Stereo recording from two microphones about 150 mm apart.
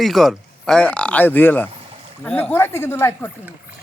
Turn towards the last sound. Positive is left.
turn(degrees=15)  # may be behind; listen again after turning